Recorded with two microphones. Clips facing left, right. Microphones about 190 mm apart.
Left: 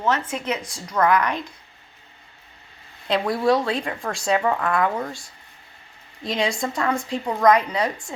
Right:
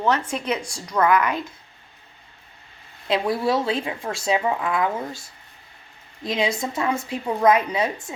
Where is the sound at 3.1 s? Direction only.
Centre (ahead or behind).